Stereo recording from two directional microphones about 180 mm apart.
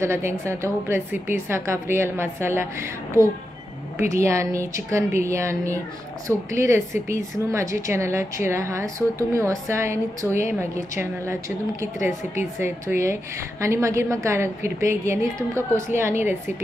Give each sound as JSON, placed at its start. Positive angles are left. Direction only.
{"t": 0.0, "sound": "a woman's voice", "side_deg": -15}
{"t": 4.1, "sound": "a woman's voice", "side_deg": -15}